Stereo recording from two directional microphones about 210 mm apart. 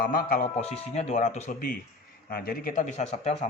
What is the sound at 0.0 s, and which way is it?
Speech, 45° left (ahead or behind).